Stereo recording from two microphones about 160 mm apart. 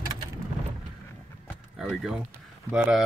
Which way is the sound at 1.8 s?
Centre (ahead or behind).